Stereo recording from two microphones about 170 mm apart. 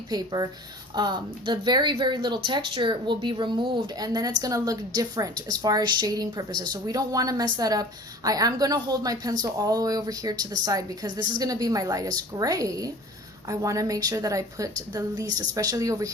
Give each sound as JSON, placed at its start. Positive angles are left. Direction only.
{"t": 0.1, "sound": "speech", "side_deg": -25}